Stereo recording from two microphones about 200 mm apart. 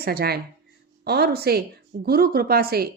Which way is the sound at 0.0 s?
50° right (ahead or behind).